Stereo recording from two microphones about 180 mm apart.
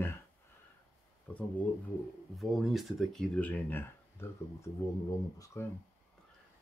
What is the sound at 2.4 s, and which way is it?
Speech, centre (ahead or behind).